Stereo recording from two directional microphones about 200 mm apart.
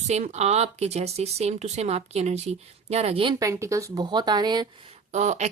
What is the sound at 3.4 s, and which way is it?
Speech, 15° right (ahead or behind).